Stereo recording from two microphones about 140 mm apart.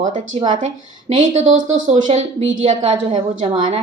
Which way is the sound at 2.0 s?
55° right (ahead or behind).